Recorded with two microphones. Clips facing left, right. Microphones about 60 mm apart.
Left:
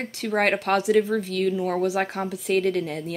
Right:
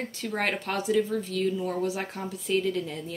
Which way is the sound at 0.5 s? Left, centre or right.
Left.